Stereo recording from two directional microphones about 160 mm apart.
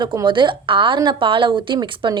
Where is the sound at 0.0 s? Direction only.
30° right (ahead or behind).